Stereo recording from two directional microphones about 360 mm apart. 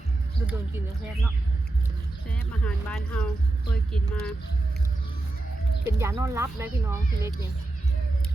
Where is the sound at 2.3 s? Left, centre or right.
Centre.